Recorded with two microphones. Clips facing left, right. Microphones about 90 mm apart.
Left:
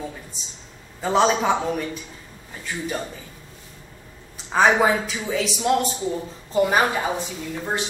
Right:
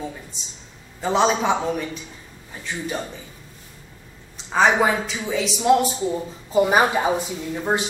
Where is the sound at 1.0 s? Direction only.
Centre (ahead or behind).